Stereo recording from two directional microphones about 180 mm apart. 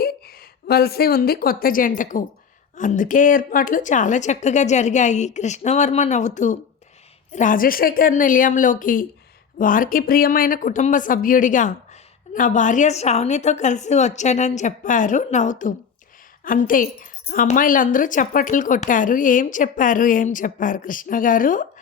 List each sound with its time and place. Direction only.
0.7 s a woman's voice: 60° left (ahead or behind)